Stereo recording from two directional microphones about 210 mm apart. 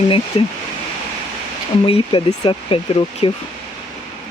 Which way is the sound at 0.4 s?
25° left (ahead or behind).